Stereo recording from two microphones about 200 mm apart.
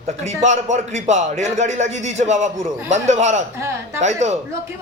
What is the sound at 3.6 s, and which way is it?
Speech, 15° right (ahead or behind).